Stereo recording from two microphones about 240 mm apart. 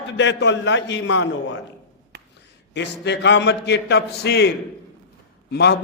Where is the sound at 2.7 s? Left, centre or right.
Left.